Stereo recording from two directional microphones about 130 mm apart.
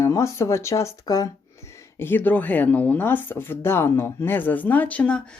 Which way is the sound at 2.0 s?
15° left (ahead or behind).